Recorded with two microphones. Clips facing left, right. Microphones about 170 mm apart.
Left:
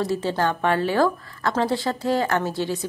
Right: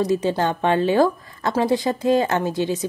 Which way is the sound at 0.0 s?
15° right (ahead or behind).